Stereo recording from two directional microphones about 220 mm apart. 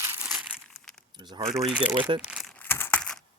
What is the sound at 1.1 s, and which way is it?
Keys jangling, 20° right (ahead or behind).